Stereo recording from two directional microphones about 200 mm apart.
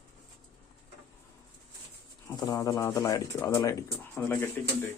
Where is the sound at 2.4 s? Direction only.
20° left (ahead or behind).